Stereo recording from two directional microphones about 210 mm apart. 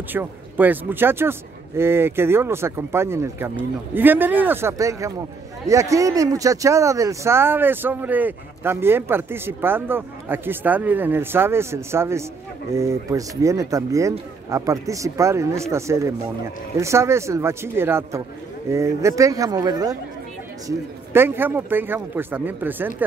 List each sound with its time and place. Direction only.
0.1 s speech: 10° right (ahead or behind)